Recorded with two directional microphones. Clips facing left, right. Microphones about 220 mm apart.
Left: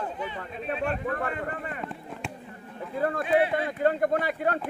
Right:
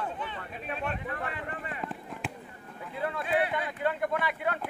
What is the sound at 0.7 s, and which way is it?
Speech, 45° left (ahead or behind).